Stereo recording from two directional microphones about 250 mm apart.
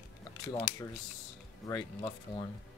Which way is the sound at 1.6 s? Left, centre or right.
Centre.